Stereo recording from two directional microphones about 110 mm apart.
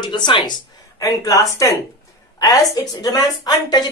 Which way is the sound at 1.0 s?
30° left (ahead or behind).